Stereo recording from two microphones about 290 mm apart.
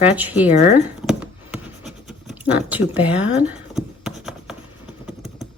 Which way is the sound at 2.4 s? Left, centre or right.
Centre.